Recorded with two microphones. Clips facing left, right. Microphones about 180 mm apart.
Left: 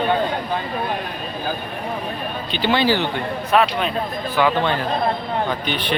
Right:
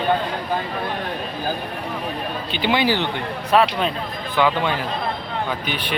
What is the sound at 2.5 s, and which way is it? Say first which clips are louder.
Speech: left 2 dB; 10° right (ahead or behind).